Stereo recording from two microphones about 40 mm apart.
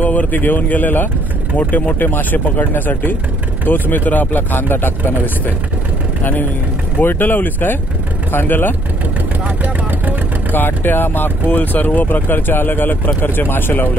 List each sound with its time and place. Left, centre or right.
0.0 s speech: left
7.0 s speech: left
9.6 s vehicle: right
10.5 s speech: left